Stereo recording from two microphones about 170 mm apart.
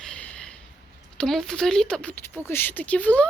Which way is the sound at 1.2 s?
Centre (ahead or behind).